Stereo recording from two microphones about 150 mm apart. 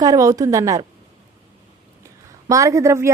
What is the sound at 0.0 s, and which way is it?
Speech, 25° right (ahead or behind).